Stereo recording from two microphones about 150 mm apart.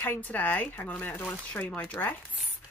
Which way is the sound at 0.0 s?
10° left (ahead or behind).